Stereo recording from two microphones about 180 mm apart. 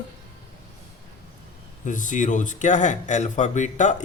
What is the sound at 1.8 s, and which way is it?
Speech, 45° left (ahead or behind).